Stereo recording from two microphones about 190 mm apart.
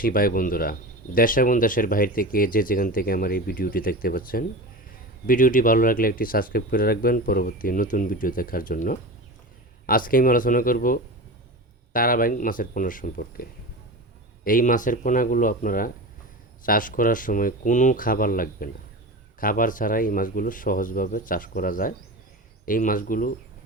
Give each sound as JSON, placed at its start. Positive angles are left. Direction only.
{"t": 0.0, "sound": "speech", "side_deg": 50}
{"t": 14.4, "sound": "speech", "side_deg": 45}